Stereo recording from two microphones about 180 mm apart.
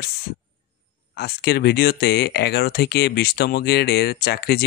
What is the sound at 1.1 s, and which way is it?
Speech, 60° left (ahead or behind).